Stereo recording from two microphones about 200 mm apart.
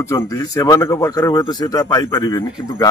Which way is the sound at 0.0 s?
15° left (ahead or behind).